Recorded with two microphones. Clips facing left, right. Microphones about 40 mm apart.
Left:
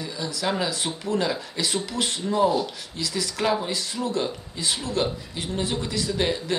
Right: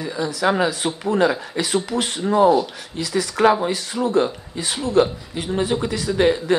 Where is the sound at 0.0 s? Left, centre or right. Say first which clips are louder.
Right 7 dB; right.